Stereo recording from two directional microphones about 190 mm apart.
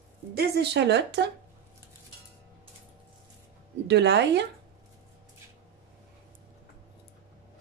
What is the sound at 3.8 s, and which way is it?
Speech, 65° right (ahead or behind).